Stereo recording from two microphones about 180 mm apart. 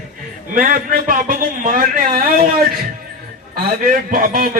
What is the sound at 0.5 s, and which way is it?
A man's voice, 45° right (ahead or behind).